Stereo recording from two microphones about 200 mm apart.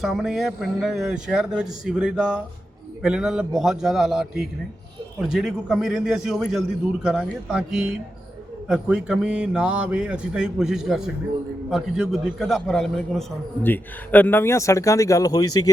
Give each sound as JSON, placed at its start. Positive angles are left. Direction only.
{"t": 0.0, "sound": "a man's voice", "side_deg": 0}